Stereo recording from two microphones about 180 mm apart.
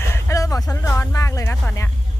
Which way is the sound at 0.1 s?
15° left (ahead or behind).